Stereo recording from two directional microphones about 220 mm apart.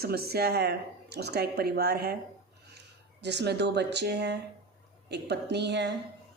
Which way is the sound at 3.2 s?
50° right (ahead or behind).